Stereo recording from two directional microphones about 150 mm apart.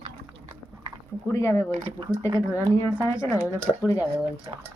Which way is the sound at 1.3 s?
20° left (ahead or behind).